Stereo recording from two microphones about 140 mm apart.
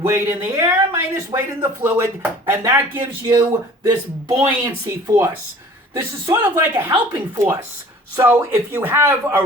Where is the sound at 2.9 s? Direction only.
35° right (ahead or behind).